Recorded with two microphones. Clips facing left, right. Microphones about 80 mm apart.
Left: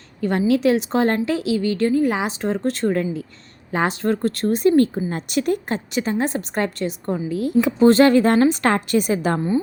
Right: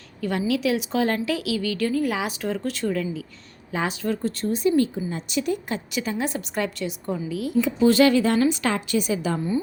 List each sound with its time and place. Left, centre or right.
0.2 s a woman's voice: left
4.7 s a woman's voice: left